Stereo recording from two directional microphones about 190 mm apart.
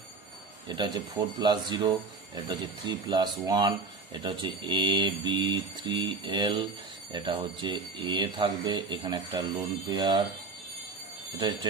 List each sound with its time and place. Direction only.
0.7 s speech: 20° right (ahead or behind)